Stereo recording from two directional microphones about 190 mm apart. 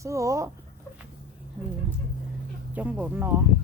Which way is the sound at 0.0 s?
15° right (ahead or behind).